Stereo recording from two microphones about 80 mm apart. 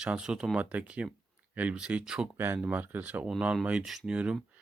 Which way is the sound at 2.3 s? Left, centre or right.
Right.